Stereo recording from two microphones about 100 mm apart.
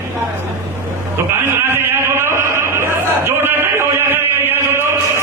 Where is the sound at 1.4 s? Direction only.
25° right (ahead or behind).